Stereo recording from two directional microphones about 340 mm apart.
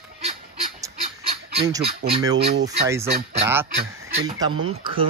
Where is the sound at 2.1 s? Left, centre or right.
Centre.